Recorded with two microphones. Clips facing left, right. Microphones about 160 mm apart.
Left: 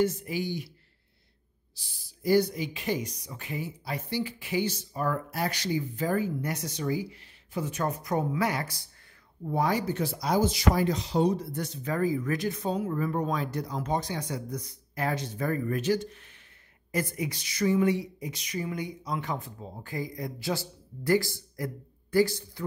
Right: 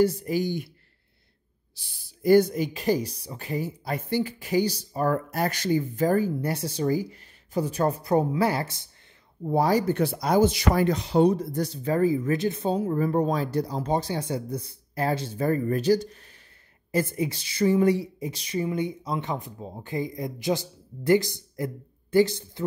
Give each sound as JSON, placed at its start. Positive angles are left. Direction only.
{"t": 0.0, "sound": "speech", "side_deg": -35}
{"t": 1.8, "sound": "speech", "side_deg": -60}
{"t": 9.8, "sound": "speech", "side_deg": -60}